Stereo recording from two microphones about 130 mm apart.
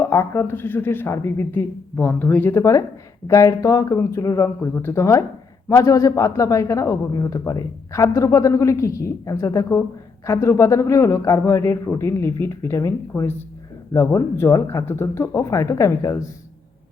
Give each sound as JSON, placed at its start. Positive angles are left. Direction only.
{"t": 0.0, "sound": "a man's voice", "side_deg": 15}